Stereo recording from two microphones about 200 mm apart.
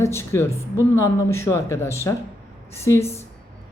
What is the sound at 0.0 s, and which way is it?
Speech, 15° left (ahead or behind).